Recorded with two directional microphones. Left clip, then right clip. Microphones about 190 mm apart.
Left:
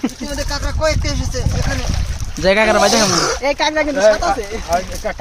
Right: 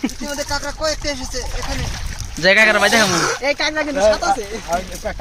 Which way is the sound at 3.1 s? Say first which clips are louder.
Left 2 dB; 65° left (ahead or behind).